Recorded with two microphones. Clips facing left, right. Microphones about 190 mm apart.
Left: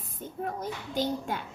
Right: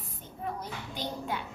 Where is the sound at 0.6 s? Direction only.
45° left (ahead or behind).